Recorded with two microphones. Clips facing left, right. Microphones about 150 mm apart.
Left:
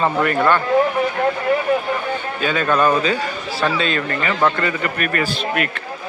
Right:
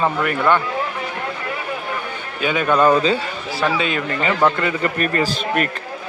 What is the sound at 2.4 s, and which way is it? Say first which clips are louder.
Speech: right 2 dB; 15° right (ahead or behind).